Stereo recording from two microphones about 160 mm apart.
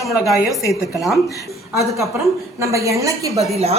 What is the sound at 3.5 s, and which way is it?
Speech, 40° right (ahead or behind).